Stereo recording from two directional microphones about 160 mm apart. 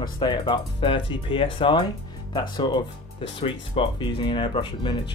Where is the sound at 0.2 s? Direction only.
30° left (ahead or behind).